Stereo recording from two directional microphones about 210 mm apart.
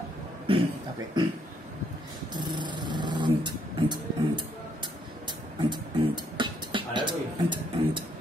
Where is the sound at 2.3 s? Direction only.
20° right (ahead or behind).